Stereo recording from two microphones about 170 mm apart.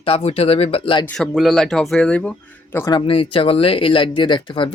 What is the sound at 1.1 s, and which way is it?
A man's voice, centre (ahead or behind).